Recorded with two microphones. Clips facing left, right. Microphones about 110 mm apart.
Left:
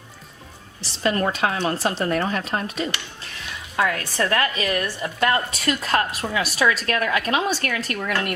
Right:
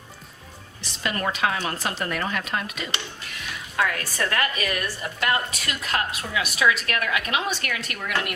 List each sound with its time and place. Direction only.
0.8 s a woman's voice: 30° left (ahead or behind)